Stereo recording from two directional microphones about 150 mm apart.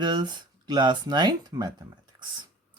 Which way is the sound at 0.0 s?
30° right (ahead or behind).